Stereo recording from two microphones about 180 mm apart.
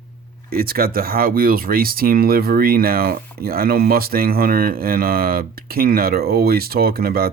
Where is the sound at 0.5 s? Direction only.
55° right (ahead or behind).